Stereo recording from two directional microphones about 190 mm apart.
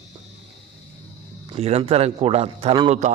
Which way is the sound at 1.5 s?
30° right (ahead or behind).